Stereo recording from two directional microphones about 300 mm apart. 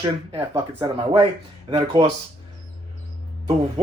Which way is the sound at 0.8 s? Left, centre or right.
Centre.